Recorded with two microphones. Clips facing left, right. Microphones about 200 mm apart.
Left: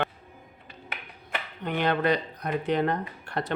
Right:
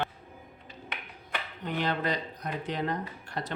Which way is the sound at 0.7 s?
60° left (ahead or behind).